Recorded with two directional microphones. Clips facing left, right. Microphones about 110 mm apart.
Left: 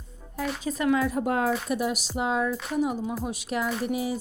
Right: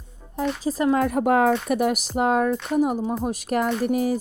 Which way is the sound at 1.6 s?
60° right (ahead or behind).